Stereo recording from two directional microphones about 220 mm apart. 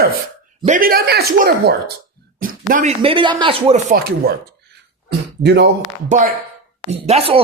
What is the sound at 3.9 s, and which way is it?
Speech, 45° right (ahead or behind).